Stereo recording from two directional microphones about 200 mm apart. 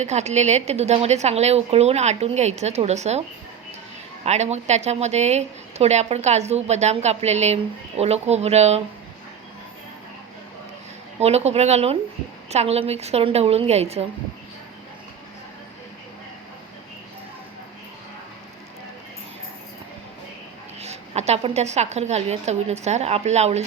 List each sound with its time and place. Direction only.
0.0 s speech: 35° right (ahead or behind)
4.3 s speech: 35° right (ahead or behind)
11.2 s speech: 30° right (ahead or behind)
20.8 s speech: 30° right (ahead or behind)